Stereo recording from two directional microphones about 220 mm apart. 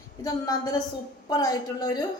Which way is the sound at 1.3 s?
15° left (ahead or behind).